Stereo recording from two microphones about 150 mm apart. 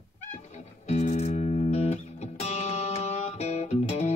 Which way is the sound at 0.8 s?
45° left (ahead or behind).